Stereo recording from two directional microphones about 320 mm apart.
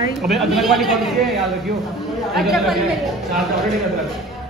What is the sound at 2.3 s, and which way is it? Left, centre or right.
Speech, centre.